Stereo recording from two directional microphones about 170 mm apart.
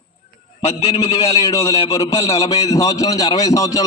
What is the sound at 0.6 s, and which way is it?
Speech, 35° left (ahead or behind).